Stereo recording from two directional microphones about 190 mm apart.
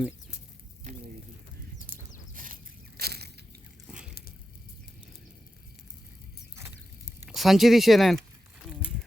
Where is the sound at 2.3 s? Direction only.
45° right (ahead or behind).